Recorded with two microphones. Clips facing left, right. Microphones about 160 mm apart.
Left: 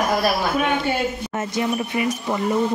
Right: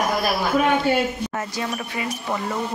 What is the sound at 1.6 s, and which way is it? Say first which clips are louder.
Speech: left 8 dB; 20° left (ahead or behind).